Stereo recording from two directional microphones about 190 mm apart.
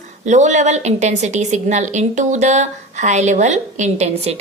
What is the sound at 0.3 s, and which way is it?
A woman's voice, 40° right (ahead or behind).